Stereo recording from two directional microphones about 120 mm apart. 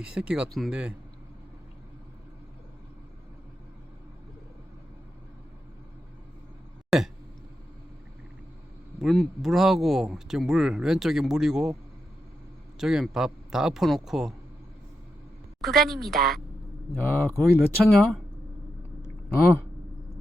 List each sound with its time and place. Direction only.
0.0 s speech: 10° right (ahead or behind)
6.9 s a sound: centre (ahead or behind)
9.0 s speech: centre (ahead or behind)
12.8 s speech: 5° right (ahead or behind)
15.6 s speech: centre (ahead or behind)
16.9 s speech: 15° left (ahead or behind)